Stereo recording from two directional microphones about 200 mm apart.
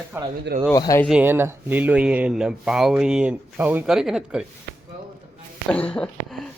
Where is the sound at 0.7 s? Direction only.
15° left (ahead or behind).